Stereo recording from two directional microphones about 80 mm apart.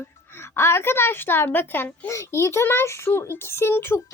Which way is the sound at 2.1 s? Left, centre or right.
Left.